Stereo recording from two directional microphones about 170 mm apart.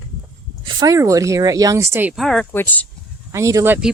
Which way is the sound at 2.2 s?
5° left (ahead or behind).